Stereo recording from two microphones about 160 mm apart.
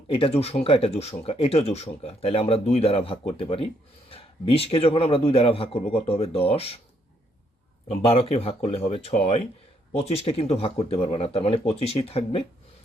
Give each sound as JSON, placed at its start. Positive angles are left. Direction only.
{"t": 0.1, "sound": "speech", "side_deg": 35}
{"t": 7.9, "sound": "speech", "side_deg": 35}